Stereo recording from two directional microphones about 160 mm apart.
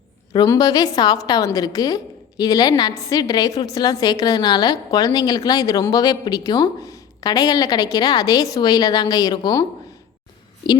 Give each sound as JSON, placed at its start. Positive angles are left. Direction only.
{"t": 0.3, "sound": "a woman's voice", "side_deg": 20}